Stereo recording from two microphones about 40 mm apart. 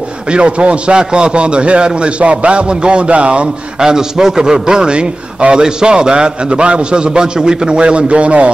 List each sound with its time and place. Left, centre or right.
0.3 s a man's voice: right
3.8 s a man's voice: centre; by 8.5 s right